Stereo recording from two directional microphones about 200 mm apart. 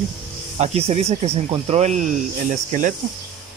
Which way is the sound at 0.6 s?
30° right (ahead or behind).